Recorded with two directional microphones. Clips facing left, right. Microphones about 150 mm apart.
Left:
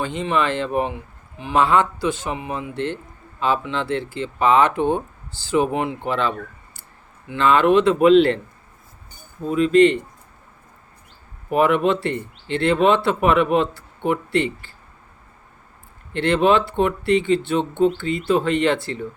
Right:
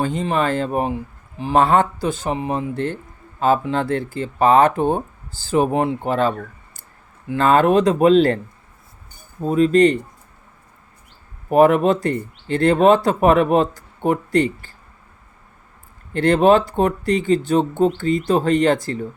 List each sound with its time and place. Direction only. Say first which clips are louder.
0.0 s speech: right 2 dB; 40° right (ahead or behind)
9.4 s speech: right 1 dB; 40° right (ahead or behind)
11.4 s speech: right 4 dB; 40° right (ahead or behind)
16.1 s speech: right 3 dB; 40° right (ahead or behind)